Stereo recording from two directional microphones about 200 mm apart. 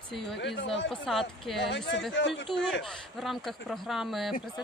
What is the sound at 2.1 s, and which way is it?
Speech, 65° left (ahead or behind).